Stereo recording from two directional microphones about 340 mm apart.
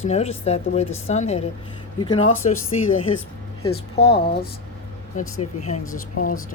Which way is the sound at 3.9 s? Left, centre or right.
Centre.